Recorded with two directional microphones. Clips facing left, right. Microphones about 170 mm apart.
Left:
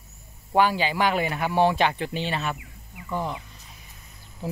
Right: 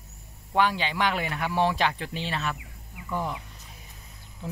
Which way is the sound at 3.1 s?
20° left (ahead or behind).